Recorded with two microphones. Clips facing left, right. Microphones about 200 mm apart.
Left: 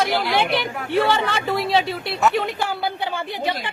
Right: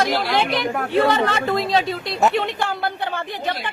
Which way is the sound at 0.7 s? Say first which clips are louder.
Right 4 dB; 55° right (ahead or behind).